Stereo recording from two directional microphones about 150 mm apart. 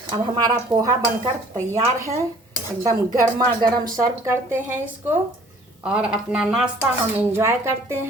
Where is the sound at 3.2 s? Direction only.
25° right (ahead or behind).